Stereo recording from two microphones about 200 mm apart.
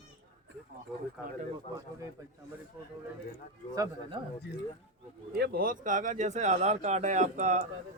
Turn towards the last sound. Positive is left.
turn(degrees=-35)  # may be behind; listen again after turning